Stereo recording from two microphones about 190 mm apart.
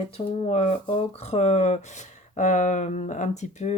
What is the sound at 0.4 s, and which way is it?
Speech, 35° left (ahead or behind).